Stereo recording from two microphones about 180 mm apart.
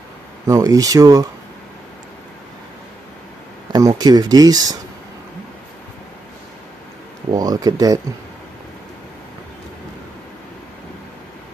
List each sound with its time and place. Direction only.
0.5 s speech: 20° right (ahead or behind)
3.7 s speech: 20° right (ahead or behind)
7.2 s speech: 20° right (ahead or behind)